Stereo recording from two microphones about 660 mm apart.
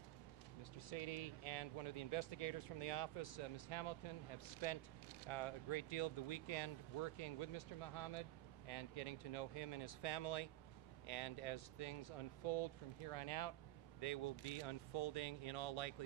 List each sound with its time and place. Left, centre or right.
0.7 s speech: left